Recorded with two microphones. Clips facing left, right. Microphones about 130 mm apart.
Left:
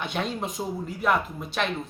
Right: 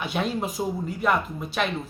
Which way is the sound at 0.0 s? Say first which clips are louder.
Right 2 dB; 5° right (ahead or behind).